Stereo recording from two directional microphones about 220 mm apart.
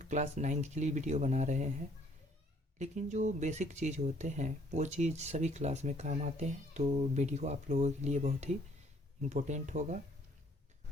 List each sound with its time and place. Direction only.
0.0 s speech: 35° right (ahead or behind)
2.7 s speech: 30° right (ahead or behind)